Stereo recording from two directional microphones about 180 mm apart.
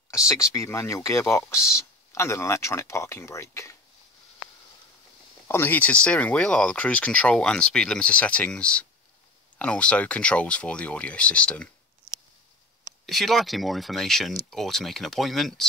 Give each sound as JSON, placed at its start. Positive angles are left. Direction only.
{"t": 0.3, "sound": "speech", "side_deg": 15}
{"t": 5.5, "sound": "speech", "side_deg": 10}